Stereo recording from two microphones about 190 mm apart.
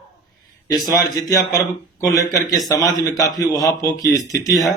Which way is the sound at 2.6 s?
20° left (ahead or behind).